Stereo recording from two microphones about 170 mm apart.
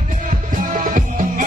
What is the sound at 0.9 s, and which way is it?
Music, 50° right (ahead or behind).